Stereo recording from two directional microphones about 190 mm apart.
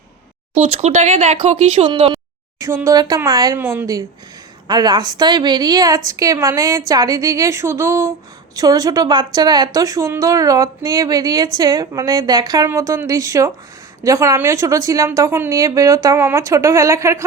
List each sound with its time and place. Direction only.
0.6 s a woman's voice: 35° right (ahead or behind); by 17.2 s 15° right (ahead or behind)